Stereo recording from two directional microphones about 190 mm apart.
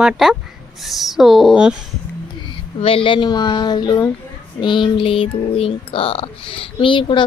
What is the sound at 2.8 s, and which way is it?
Speech, 30° left (ahead or behind).